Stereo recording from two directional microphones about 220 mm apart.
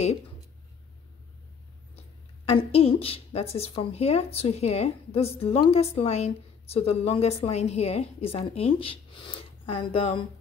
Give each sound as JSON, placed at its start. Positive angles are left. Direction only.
{"t": 2.4, "sound": "speech", "side_deg": 25}